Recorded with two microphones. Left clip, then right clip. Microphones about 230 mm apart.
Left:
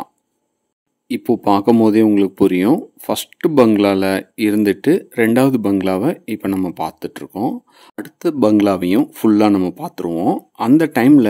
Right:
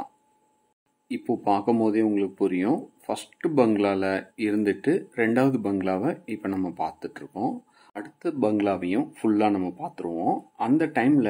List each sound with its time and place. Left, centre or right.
1.0 s speech: left